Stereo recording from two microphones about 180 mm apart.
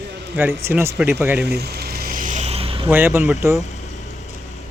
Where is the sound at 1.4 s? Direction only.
65° right (ahead or behind); by 2.8 s 30° right (ahead or behind).